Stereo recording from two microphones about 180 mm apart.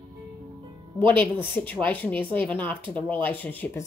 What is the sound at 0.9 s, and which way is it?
Speech, 10° left (ahead or behind).